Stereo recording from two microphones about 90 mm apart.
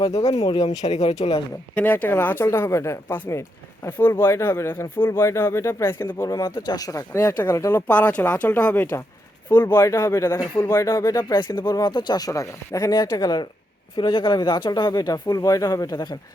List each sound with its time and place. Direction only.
0.0 s speech: 50° left (ahead or behind)
1.7 s speech: 20° left (ahead or behind)
2.5 s speech: 30° left (ahead or behind)
6.2 s speech: 40° left (ahead or behind)
7.2 s speech: 25° left (ahead or behind)
7.8 s speech: 15° left (ahead or behind)
9.6 s speech: 50° left (ahead or behind)
9.8 s speech: 35° left (ahead or behind)
13.9 s speech: 65° left (ahead or behind); by 16.1 s 50° left (ahead or behind)